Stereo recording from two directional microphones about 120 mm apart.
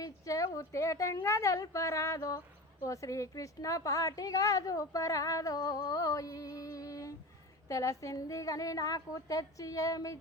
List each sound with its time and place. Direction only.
0.0 s a woman's voice: 30° left (ahead or behind)